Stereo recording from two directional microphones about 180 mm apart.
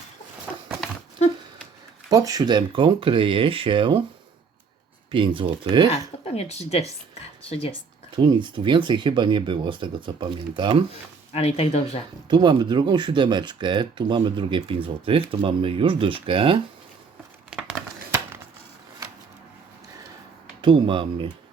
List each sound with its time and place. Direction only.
2.0 s speech: 20° right (ahead or behind)
5.1 s speech: 30° right (ahead or behind)
5.9 s speech: 35° left (ahead or behind)
8.1 s speech: 25° right (ahead or behind)
11.3 s speech: 35° left (ahead or behind)
12.3 s speech: 25° right (ahead or behind)
17.5 s crumpling: 5° right (ahead or behind)
20.6 s speech: 25° right (ahead or behind)